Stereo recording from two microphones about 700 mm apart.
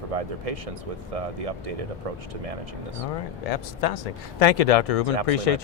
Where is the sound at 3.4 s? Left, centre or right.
Left.